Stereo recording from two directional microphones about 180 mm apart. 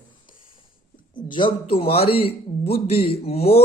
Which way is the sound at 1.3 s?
30° left (ahead or behind).